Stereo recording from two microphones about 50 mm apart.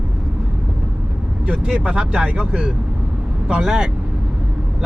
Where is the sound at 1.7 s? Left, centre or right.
Right.